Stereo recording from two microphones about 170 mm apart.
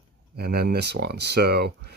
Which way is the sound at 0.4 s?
65° right (ahead or behind).